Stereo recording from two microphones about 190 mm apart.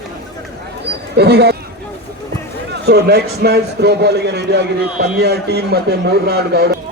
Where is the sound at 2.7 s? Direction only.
60° right (ahead or behind).